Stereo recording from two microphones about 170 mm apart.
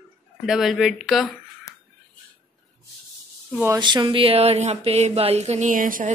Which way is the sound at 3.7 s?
25° right (ahead or behind).